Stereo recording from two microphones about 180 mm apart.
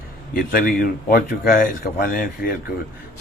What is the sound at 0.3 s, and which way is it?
Speech, 50° left (ahead or behind).